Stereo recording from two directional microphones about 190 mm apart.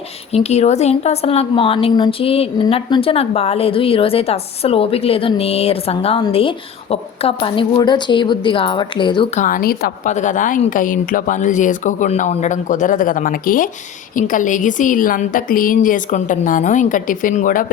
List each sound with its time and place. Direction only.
0.3 s a woman's voice: 35° left (ahead or behind)
9.3 s a woman's voice: 45° left (ahead or behind)